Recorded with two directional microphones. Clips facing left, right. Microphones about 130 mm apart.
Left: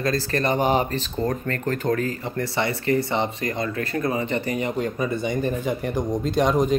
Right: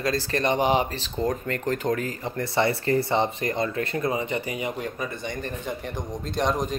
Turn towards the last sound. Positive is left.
turn(degrees=0)  # may be behind; listen again after turning